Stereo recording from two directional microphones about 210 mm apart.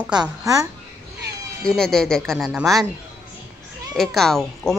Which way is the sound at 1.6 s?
Centre (ahead or behind).